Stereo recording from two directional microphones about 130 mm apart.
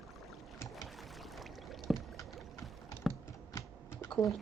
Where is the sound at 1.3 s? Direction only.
Centre (ahead or behind).